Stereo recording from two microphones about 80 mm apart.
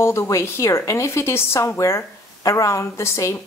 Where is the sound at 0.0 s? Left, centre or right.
Left.